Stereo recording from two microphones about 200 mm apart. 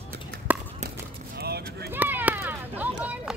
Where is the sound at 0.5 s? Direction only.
10° right (ahead or behind).